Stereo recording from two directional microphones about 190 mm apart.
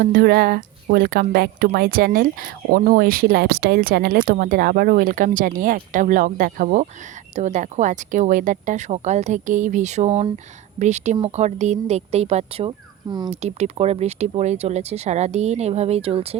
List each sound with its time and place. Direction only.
0.0 s speech: 50° right (ahead or behind); by 13.3 s 20° right (ahead or behind)
13.3 s speech: 35° right (ahead or behind)